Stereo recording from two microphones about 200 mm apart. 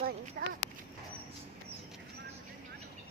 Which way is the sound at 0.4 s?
45° right (ahead or behind).